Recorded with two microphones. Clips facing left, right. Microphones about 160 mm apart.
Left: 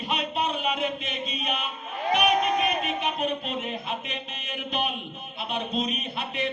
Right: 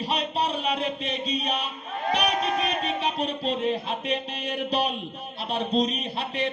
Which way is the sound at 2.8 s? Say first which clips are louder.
Right 1 dB; 35° right (ahead or behind).